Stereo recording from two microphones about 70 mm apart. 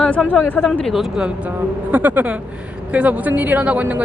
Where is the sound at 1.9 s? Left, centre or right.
Right.